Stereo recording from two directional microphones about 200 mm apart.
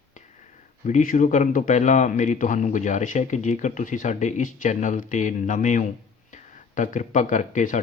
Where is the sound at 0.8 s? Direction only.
40° left (ahead or behind).